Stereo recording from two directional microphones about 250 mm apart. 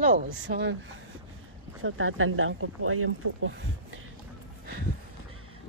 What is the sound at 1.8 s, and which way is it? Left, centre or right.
Speech, right.